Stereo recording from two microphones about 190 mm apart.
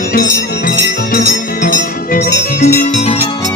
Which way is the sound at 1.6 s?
45° left (ahead or behind).